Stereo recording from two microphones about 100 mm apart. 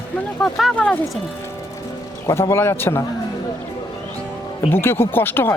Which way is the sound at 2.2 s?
25° left (ahead or behind).